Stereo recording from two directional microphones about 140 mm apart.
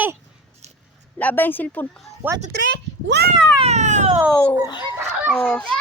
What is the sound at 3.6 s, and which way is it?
Cat, 55° right (ahead or behind).